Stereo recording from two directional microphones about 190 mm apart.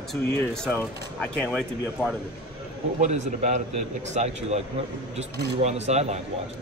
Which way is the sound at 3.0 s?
40° right (ahead or behind).